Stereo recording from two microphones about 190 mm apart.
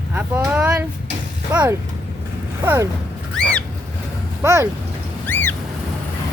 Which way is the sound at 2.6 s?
15° right (ahead or behind).